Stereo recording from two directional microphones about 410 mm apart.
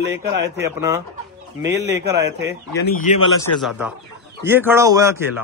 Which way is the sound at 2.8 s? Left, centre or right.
Centre.